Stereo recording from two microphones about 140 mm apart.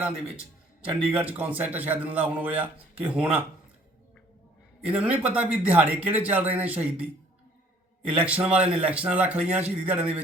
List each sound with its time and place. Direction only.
0.9 s a man's voice: 10° right (ahead or behind)
4.9 s a man's voice: 10° right (ahead or behind)
8.2 s a man's voice: 10° right (ahead or behind)